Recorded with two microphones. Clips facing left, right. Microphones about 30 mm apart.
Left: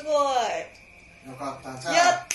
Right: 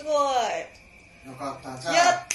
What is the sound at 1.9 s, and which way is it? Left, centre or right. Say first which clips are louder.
Speech: even; centre.